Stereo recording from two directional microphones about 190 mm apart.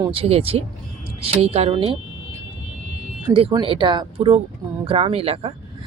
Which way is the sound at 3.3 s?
30° right (ahead or behind).